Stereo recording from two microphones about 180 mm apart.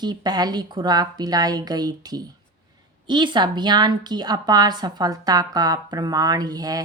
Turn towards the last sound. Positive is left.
turn(degrees=-20)  # may be behind; listen again after turning